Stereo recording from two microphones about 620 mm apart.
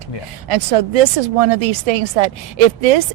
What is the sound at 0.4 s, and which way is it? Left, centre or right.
Speech, right.